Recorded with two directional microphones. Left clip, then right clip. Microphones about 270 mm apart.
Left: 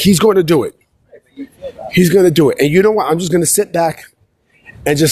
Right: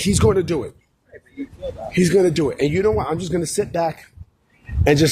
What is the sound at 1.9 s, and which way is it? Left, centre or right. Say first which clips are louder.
Speech: left 6 dB; left.